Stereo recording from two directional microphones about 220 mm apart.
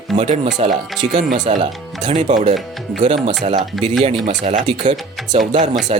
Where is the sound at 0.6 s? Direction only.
30° right (ahead or behind).